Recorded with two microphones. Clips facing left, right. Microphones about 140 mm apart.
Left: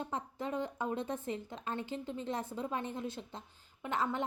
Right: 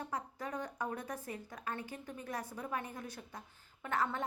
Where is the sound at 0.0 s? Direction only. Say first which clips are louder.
Left 3 dB; 25° left (ahead or behind).